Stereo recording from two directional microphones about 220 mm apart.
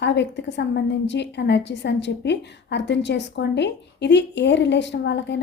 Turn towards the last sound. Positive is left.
turn(degrees=50)  # may be behind; listen again after turning